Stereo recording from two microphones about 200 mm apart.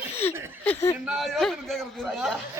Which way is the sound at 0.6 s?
10° left (ahead or behind).